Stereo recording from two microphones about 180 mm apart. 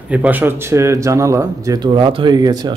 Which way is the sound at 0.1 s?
10° right (ahead or behind).